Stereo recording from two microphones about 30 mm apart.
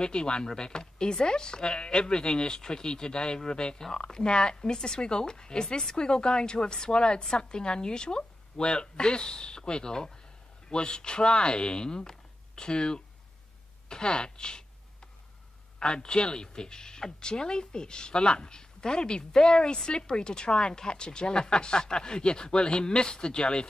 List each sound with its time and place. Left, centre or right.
0.0 s a woman's voice: left
13.8 s a sound: left
15.8 s speech: left